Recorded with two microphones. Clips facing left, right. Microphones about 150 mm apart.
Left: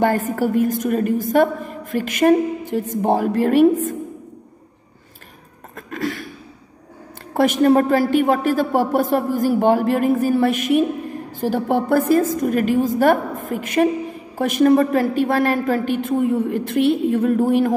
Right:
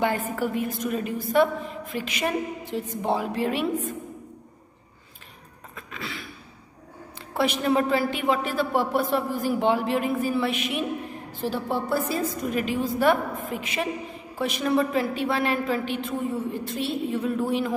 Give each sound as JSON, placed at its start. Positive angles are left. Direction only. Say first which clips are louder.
{"t": 0.0, "sound": "a woman's voice", "louder": "left 7 dB", "side_deg": 45}
{"t": 5.8, "sound": "a sound", "louder": "left 11 dB", "side_deg": 50}
{"t": 7.3, "sound": "a woman's voice", "louder": "left 8 dB", "side_deg": 45}